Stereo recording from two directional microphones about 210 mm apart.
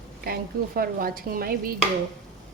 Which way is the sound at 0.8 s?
45° right (ahead or behind).